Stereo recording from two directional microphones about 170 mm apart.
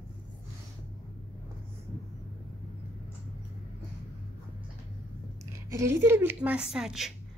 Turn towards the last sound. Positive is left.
turn(degrees=-5)  # may be behind; listen again after turning